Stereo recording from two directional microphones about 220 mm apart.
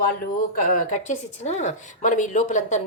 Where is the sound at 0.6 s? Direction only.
35° left (ahead or behind).